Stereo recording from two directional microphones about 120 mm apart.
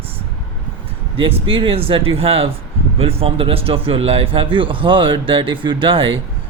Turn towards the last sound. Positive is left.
turn(degrees=-45)  # may be behind; listen again after turning